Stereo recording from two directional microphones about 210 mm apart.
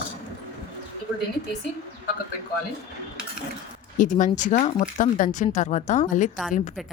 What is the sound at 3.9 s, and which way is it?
Speech, 35° left (ahead or behind).